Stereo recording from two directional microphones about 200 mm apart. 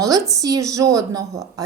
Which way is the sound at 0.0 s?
15° right (ahead or behind).